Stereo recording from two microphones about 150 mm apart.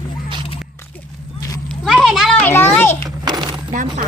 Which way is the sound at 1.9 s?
Centre (ahead or behind).